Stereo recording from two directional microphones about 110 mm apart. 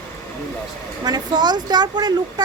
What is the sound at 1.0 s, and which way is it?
A woman's voice, 40° right (ahead or behind).